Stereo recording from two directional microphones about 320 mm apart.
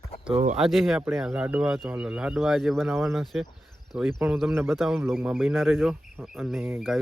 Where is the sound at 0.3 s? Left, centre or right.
Centre.